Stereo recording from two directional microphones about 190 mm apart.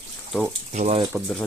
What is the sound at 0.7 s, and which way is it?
Speech, 40° right (ahead or behind).